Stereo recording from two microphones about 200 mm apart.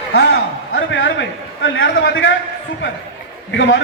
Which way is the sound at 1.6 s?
65° left (ahead or behind).